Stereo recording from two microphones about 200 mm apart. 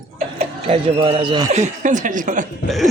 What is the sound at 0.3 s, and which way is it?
Speech, 30° right (ahead or behind).